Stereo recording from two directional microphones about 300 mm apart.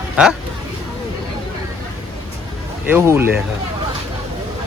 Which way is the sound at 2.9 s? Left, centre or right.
Centre.